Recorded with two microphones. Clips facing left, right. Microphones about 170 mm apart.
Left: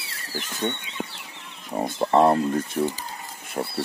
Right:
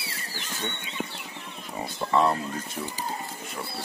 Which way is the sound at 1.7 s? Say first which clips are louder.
Left 8 dB; 40° left (ahead or behind).